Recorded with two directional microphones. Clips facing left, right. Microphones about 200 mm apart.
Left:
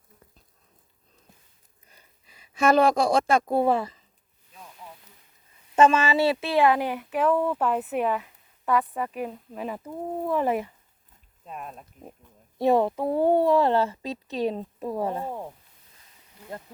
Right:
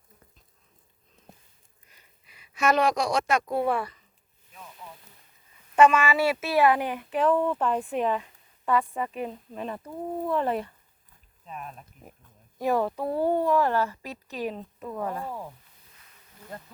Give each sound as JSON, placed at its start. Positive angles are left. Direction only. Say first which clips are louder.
{"t": 1.9, "sound": "a sound", "louder": "left 3 dB", "side_deg": 30}
{"t": 3.5, "sound": "a woman's voice", "louder": "left 4 dB", "side_deg": 25}
{"t": 5.7, "sound": "speech", "louder": "even", "side_deg": 25}
{"t": 12.5, "sound": "a woman's voice", "louder": "left 4 dB", "side_deg": 25}
{"t": 14.5, "sound": "a woman's voice", "louder": "left 5 dB", "side_deg": 35}